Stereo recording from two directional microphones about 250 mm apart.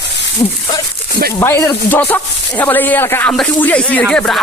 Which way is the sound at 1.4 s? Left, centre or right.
Centre.